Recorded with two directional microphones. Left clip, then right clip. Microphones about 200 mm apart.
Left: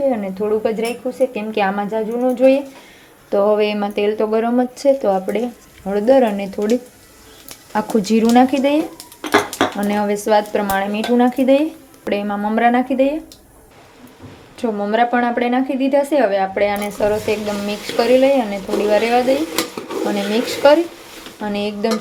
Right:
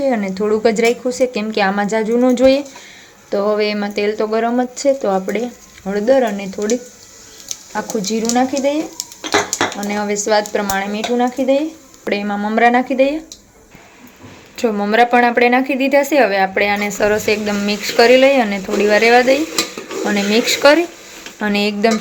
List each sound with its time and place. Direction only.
0.0 s speech: 10° right (ahead or behind)
3.2 s speech: centre (ahead or behind)
9.8 s speech: 5° left (ahead or behind)
12.0 s speech: 5° right (ahead or behind)
14.5 s speech: 5° right (ahead or behind)